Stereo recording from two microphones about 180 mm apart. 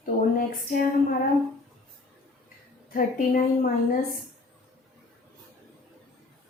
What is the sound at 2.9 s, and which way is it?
Speech, 50° left (ahead or behind).